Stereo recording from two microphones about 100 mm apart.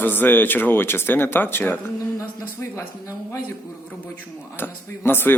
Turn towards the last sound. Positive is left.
turn(degrees=20)  # may be behind; listen again after turning